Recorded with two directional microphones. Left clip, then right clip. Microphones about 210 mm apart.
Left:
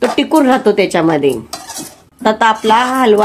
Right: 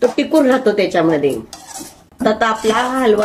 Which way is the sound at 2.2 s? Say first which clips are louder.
Left 4 dB; 35° left (ahead or behind).